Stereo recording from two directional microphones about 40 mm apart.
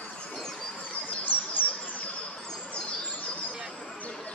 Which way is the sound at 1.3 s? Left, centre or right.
Left.